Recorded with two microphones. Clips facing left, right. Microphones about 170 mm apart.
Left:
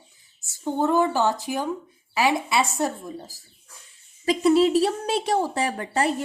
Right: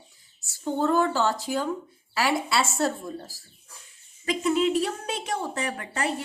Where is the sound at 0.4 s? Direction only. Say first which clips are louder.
Left 2 dB; 20° left (ahead or behind).